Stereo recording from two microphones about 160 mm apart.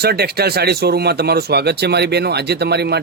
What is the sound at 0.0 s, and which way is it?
Speech, 80° right.